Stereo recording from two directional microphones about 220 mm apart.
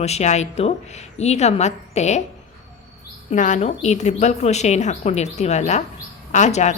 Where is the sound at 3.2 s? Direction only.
35° left (ahead or behind).